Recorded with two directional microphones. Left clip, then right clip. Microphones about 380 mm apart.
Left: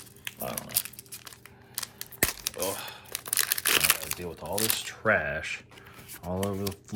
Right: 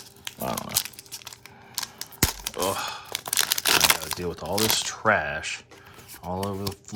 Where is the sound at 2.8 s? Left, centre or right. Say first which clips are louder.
Right 8 dB; centre.